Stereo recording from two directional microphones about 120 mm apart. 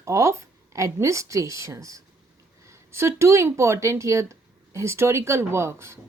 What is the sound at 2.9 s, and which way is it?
Speech, 20° right (ahead or behind).